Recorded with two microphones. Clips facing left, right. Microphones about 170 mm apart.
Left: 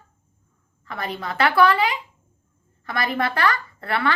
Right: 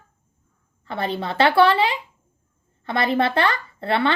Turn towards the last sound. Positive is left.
turn(degrees=-25)  # may be behind; listen again after turning